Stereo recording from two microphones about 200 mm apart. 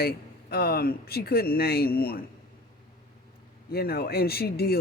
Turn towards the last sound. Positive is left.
turn(degrees=50)  # may be behind; listen again after turning